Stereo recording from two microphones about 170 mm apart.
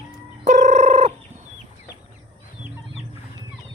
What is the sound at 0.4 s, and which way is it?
Fowl, 45° right (ahead or behind).